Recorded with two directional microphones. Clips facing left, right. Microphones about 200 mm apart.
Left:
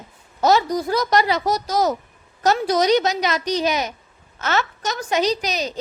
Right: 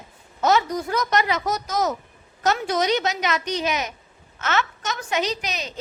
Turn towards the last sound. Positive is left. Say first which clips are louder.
# left 6 dB
turn(degrees=35)  # may be behind; listen again after turning